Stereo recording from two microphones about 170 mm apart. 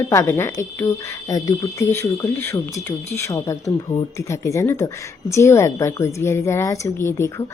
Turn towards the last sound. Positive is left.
turn(degrees=15)  # may be behind; listen again after turning